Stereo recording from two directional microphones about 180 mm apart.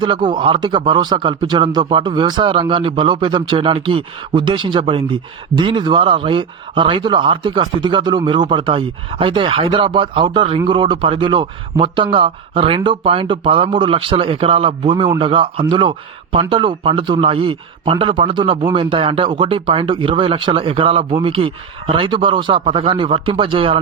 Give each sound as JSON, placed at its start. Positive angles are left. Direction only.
{"t": 0.0, "sound": "speech", "side_deg": -25}